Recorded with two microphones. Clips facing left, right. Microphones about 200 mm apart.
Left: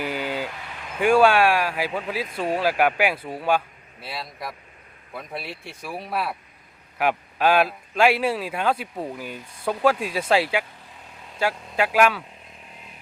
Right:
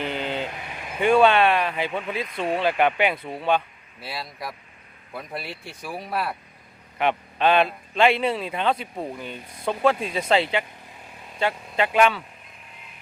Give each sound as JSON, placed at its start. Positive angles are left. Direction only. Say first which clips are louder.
{"t": 0.3, "sound": "vehicle", "louder": "even", "side_deg": -20}
{"t": 0.9, "sound": "a man's voice", "louder": "even", "side_deg": 5}